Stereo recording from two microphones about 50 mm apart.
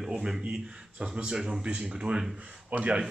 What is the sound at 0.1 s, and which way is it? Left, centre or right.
Speech, centre.